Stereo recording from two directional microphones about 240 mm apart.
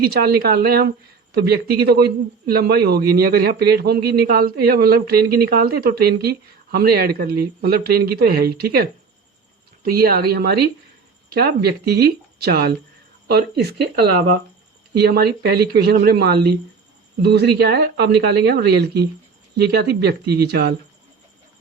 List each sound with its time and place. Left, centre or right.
0.0 s a man's voice: right
9.9 s a man's voice: right